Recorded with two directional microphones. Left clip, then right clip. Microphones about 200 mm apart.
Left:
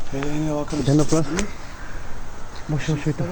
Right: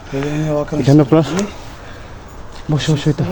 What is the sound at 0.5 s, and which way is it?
Speech, 25° right (ahead or behind).